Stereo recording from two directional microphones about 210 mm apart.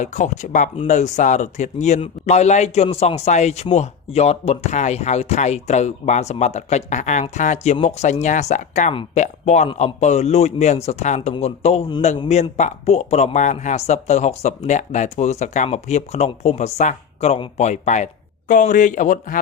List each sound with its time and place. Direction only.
0.0 s speech: 35° left (ahead or behind)